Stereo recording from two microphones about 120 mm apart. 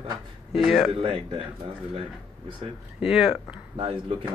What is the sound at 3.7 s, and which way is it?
Speech, 45° right (ahead or behind).